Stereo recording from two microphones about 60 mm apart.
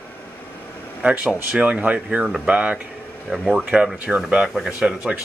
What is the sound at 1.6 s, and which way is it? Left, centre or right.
Speech, right.